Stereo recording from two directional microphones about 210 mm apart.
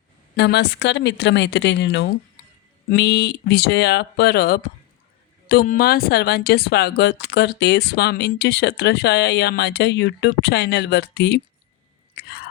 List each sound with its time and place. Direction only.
0.3 s speech: 50° left (ahead or behind)
12.1 s chewing: 45° left (ahead or behind)